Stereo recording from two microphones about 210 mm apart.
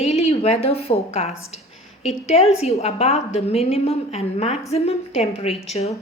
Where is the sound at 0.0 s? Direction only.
30° left (ahead or behind).